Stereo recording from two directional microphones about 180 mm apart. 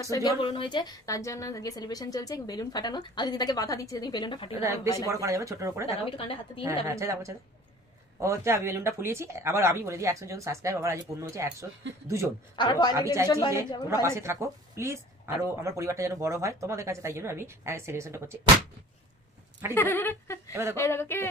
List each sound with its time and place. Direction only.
0.0 s a woman's voice: 20° left (ahead or behind)
0.4 s a woman's voice: 30° left (ahead or behind)
4.6 s a woman's voice: 15° right (ahead or behind)
6.0 s a woman's voice: 30° left (ahead or behind)
6.6 s a woman's voice: 15° right (ahead or behind)
12.5 s a woman's voice: 25° left (ahead or behind)
12.9 s a woman's voice: 15° right (ahead or behind)
19.7 s speech: 10° left (ahead or behind)